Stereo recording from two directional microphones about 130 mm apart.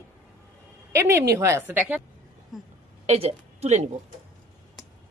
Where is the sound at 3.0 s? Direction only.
55° right (ahead or behind).